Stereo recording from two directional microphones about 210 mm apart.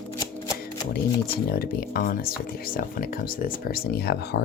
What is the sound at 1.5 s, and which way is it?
Speech, 45° left (ahead or behind).